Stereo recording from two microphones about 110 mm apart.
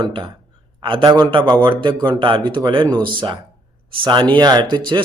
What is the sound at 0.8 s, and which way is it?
Speech, 50° right (ahead or behind).